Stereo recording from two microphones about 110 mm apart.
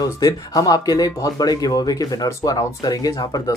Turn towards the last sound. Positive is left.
turn(degrees=35)  # may be behind; listen again after turning